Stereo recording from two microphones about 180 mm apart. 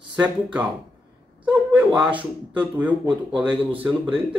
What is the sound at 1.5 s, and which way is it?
Speech, 5° right (ahead or behind).